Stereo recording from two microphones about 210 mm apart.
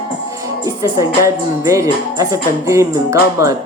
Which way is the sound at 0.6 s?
15° right (ahead or behind).